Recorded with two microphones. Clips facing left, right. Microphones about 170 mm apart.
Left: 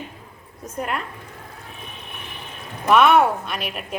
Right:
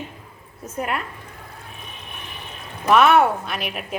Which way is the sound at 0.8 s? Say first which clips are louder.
Right 1 dB; 5° right (ahead or behind).